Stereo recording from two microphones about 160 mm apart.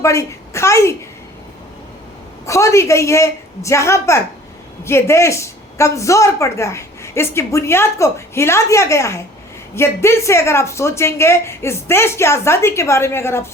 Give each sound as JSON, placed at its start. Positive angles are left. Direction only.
{"t": 0.0, "sound": "speech", "side_deg": 20}
{"t": 2.5, "sound": "a woman's voice", "side_deg": 20}